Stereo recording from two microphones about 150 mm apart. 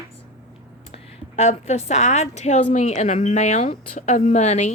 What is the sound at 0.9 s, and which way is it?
Speech, 50° left (ahead or behind).